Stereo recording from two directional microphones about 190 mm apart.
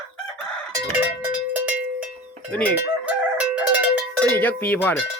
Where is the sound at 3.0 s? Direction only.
5° right (ahead or behind).